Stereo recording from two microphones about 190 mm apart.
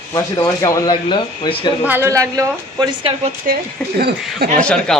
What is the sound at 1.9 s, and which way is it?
Speech, 15° right (ahead or behind).